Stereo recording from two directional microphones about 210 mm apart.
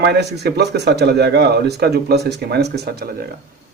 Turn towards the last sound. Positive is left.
turn(degrees=-45)  # may be behind; listen again after turning